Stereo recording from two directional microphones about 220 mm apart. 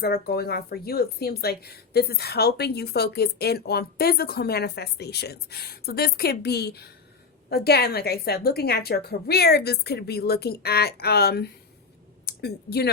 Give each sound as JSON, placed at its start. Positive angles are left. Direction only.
{"t": 0.0, "sound": "speech", "side_deg": 45}